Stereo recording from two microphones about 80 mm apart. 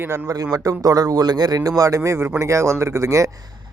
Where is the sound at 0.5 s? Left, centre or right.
Right.